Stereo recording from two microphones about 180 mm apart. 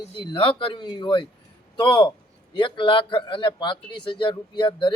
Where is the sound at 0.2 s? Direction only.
25° left (ahead or behind).